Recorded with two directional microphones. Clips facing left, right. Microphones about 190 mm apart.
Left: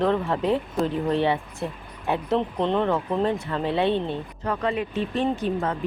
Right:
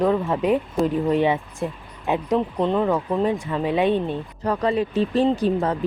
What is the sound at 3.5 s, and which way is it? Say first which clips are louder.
Speech: right 3 dB; 15° right (ahead or behind).